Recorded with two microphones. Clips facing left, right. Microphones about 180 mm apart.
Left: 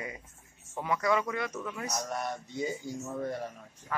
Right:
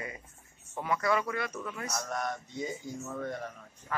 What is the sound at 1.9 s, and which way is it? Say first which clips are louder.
Speech: even; 40° left (ahead or behind).